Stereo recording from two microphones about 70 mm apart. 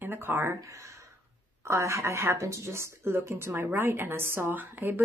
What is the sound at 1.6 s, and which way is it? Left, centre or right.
A woman's voice, right.